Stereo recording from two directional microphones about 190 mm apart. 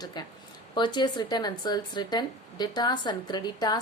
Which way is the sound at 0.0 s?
20° left (ahead or behind).